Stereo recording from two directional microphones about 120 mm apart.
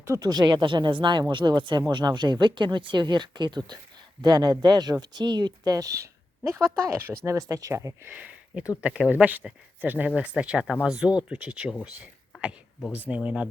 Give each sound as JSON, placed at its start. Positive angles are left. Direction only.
{"t": 0.2, "sound": "speech", "side_deg": -35}
{"t": 8.1, "sound": "speech", "side_deg": -15}
{"t": 12.3, "sound": "a sound", "side_deg": -5}
{"t": 13.1, "sound": "speech", "side_deg": -10}